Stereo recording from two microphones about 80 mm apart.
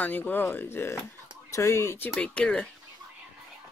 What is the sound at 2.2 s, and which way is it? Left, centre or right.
Speech, centre.